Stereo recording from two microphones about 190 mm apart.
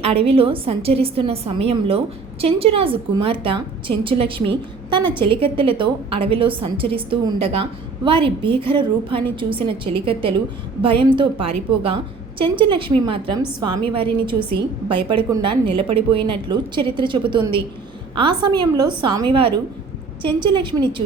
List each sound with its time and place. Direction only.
0.0 s a woman's voice: 30° right (ahead or behind)